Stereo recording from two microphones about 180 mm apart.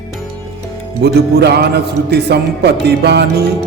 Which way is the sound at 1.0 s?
65° right (ahead or behind).